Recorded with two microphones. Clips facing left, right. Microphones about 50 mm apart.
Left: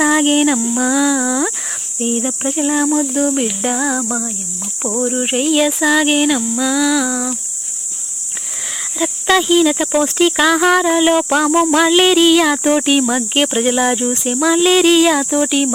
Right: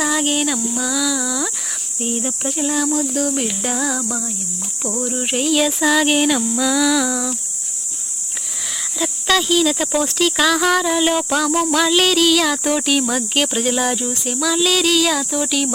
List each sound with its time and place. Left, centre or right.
0.0 s speech: left
2.0 s a sound: centre
2.6 s speech: left
3.3 s speech: centre
5.4 s a sound: centre
9.0 s speech: centre